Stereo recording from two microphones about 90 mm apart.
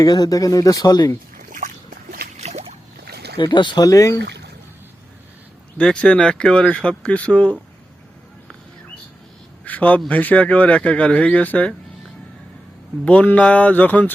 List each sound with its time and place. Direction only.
0.0 s speech: 50° left (ahead or behind)
3.3 s speech: 60° left (ahead or behind)
3.8 s speech: 40° left (ahead or behind)
5.7 s speech: 10° left (ahead or behind)
9.6 s a sound: 15° left (ahead or behind)
10.1 s speech: 15° left (ahead or behind)
13.1 s speech: 15° left (ahead or behind)